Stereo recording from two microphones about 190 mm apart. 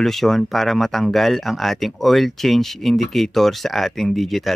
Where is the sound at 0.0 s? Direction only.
Centre (ahead or behind).